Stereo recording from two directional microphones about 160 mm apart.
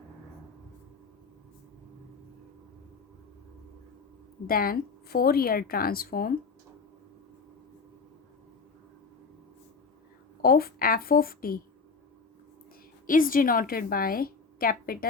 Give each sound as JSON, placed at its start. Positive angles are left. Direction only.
{"t": 4.4, "sound": "a woman's voice", "side_deg": 65}
{"t": 10.4, "sound": "a woman's voice", "side_deg": 65}
{"t": 13.1, "sound": "a woman's voice", "side_deg": 60}